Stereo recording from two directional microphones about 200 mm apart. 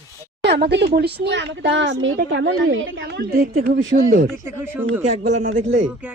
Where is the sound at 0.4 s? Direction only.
55° right (ahead or behind).